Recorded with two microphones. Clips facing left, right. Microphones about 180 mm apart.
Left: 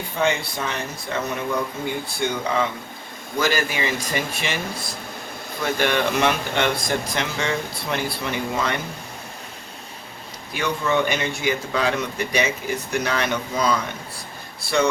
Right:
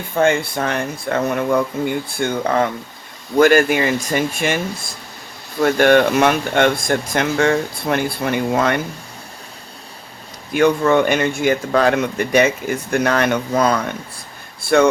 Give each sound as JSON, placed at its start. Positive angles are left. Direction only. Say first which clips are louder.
{"t": 0.2, "sound": "speech", "louder": "right 7 dB", "side_deg": -55}
{"t": 10.5, "sound": "speech", "louder": "right 9 dB", "side_deg": -55}